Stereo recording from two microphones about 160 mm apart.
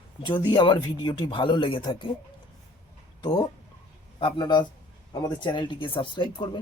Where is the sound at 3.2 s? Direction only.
30° left (ahead or behind).